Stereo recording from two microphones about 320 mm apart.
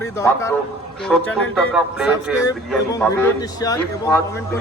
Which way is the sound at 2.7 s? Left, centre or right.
Centre.